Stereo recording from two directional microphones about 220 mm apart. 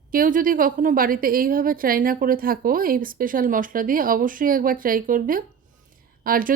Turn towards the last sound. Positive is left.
turn(degrees=-40)  # may be behind; listen again after turning